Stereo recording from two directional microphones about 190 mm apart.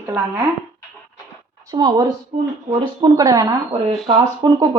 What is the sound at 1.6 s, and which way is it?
A woman's voice, 20° right (ahead or behind).